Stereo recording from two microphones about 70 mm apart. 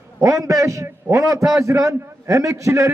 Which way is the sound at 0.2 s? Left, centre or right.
Right.